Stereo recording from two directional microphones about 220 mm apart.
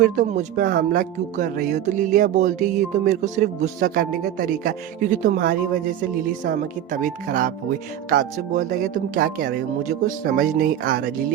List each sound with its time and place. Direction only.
0.0 s speech: 35° right (ahead or behind)